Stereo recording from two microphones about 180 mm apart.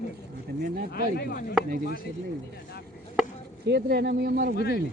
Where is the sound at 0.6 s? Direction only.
55° right (ahead or behind).